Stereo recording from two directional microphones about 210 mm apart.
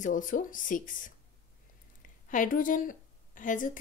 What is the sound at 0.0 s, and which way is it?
Speech, 40° left (ahead or behind).